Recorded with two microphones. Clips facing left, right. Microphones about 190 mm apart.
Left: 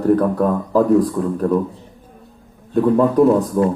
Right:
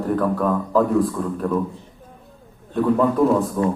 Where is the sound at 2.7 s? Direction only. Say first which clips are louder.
Left 4 dB; 40° left (ahead or behind).